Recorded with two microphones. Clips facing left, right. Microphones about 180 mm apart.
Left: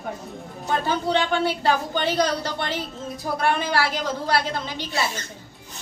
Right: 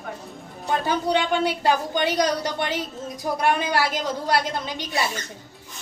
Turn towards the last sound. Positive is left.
turn(degrees=-15)  # may be behind; listen again after turning